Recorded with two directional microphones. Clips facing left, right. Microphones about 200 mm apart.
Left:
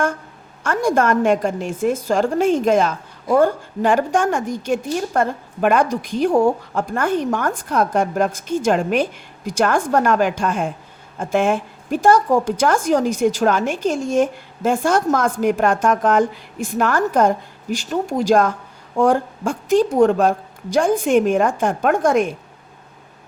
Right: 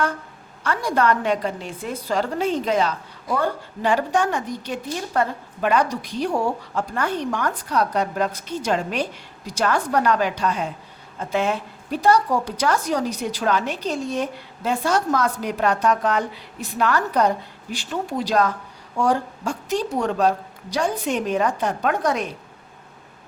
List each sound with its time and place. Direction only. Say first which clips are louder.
0.6 s a woman's voice: left 4 dB; 50° left (ahead or behind)